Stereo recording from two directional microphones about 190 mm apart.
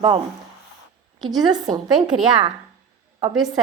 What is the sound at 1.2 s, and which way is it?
Speech, 20° right (ahead or behind).